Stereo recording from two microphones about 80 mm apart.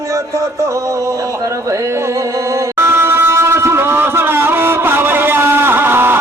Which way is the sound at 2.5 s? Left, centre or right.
Right.